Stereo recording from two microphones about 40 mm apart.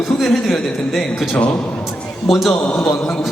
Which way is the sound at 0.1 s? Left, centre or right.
Centre.